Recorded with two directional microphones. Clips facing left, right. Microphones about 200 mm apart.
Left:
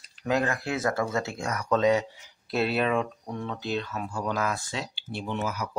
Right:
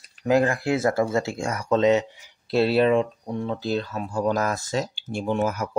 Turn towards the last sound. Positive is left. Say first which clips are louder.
# right 7 dB
turn(degrees=-50)  # may be behind; listen again after turning